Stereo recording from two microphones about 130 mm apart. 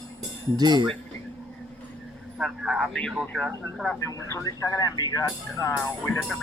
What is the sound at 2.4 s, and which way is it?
A man's voice, centre (ahead or behind).